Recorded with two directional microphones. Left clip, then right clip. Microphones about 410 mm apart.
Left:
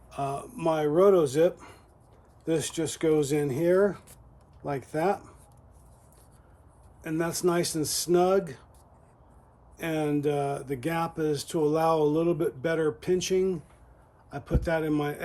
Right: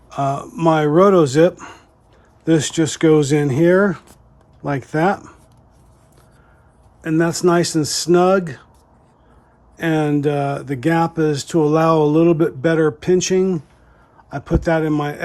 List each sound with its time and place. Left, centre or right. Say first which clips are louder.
0.1 s speech: right 11 dB; centre
7.0 s speech: right 11 dB; centre
9.7 s speech: right 10 dB; centre